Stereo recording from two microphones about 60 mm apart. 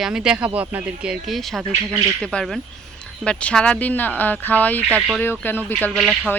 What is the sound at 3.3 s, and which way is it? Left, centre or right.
Speech, centre.